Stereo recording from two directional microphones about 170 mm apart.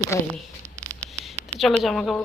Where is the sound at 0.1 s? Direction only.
15° left (ahead or behind).